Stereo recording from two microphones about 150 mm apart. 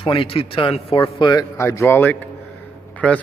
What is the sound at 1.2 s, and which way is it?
A man's voice, 25° left (ahead or behind).